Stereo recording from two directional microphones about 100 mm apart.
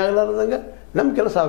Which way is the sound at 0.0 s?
20° left (ahead or behind).